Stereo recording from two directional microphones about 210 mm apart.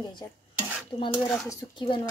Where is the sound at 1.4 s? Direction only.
20° left (ahead or behind).